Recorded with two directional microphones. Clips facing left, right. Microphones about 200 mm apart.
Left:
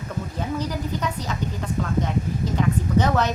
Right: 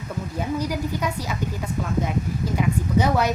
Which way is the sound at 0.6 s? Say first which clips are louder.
Right 1 dB; 10° right (ahead or behind).